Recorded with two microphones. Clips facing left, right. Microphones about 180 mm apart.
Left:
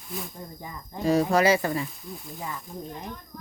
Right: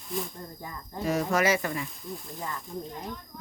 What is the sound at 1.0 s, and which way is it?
Speech, 30° left (ahead or behind).